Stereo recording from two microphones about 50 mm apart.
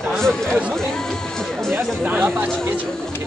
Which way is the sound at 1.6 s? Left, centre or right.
Centre.